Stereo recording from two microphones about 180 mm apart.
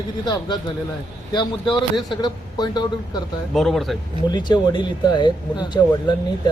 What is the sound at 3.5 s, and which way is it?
Speech, centre (ahead or behind).